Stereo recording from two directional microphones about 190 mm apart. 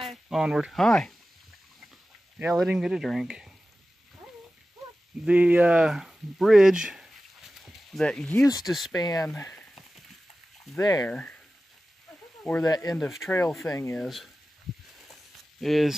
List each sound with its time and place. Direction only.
0.0 s speech: centre (ahead or behind)
2.3 s speech: 5° right (ahead or behind)
5.2 s speech: 10° right (ahead or behind)
7.5 s a sound: centre (ahead or behind)
8.6 s speech: centre (ahead or behind)
8.9 s speech: 20° left (ahead or behind)
9.4 s speech: 10° left (ahead or behind)
10.8 s speech: 20° left (ahead or behind)
11.1 s speech: 5° left (ahead or behind)
12.6 s speech: 20° left (ahead or behind)
12.9 s speech: 5° left (ahead or behind)
14.0 s speech: centre (ahead or behind)
14.7 s a sound: centre (ahead or behind)
15.6 s speech: centre (ahead or behind)